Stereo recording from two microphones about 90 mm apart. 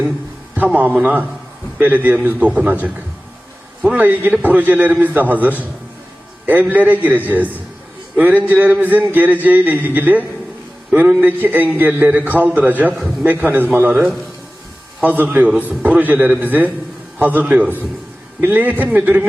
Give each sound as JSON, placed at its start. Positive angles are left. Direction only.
{"t": 0.5, "sound": "a man's voice", "side_deg": -15}
{"t": 3.9, "sound": "a man's voice", "side_deg": -20}